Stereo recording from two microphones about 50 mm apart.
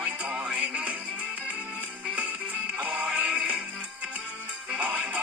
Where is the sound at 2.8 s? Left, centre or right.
Right.